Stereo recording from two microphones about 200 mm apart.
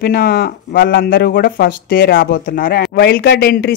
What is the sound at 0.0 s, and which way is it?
Speech, 50° left (ahead or behind).